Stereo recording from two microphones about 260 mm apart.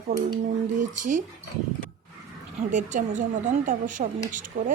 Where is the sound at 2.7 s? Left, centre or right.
Right.